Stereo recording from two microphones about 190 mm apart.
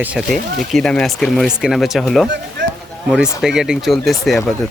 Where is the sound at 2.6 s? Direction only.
70° right (ahead or behind).